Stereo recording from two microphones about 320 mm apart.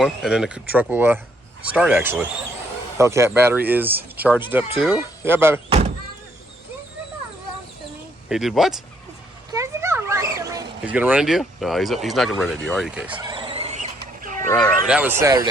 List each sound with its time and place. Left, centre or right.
0.0 s speech: centre
8.3 s speech: centre
13.3 s wild animals: centre
14.5 s speech: centre